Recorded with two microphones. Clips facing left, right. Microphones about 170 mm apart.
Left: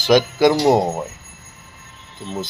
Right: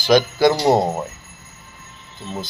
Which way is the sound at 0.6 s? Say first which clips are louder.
Left 1 dB; 5° left (ahead or behind).